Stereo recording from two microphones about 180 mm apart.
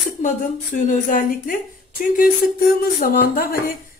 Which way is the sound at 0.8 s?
45° left (ahead or behind).